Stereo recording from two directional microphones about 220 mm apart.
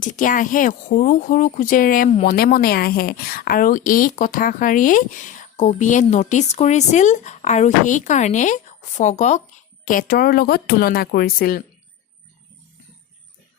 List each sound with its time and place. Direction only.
0.0 s a woman's voice: 35° left (ahead or behind)